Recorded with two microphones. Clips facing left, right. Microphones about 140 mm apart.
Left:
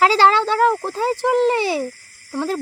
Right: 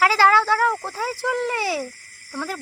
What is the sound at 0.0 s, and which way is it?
Speech, 25° left (ahead or behind).